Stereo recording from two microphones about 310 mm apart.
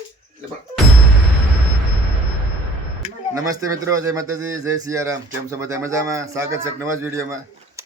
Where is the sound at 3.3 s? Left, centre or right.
Centre.